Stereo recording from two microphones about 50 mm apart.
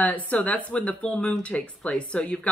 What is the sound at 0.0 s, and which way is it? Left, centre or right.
Speech, left.